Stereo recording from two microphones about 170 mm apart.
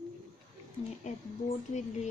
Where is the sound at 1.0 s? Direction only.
45° left (ahead or behind).